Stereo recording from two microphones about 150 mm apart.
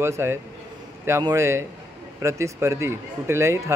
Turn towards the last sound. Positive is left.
turn(degrees=-20)  # may be behind; listen again after turning